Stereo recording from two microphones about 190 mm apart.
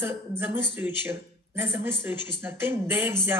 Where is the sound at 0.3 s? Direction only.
10° right (ahead or behind).